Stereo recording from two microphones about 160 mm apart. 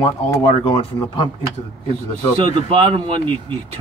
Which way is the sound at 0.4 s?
30° left (ahead or behind).